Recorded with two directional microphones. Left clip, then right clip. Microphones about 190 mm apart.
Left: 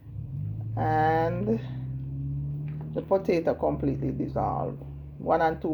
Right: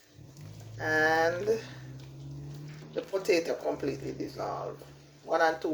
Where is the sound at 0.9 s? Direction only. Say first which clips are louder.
Left 1 dB; 25° left (ahead or behind).